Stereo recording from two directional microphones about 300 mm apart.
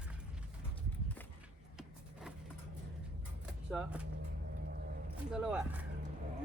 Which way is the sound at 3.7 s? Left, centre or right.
Centre.